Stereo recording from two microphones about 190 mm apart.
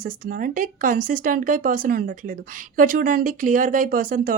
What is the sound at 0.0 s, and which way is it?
A woman's voice, 45° right (ahead or behind).